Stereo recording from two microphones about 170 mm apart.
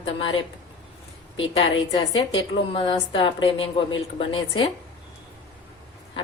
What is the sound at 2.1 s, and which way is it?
A woman's voice, 30° left (ahead or behind).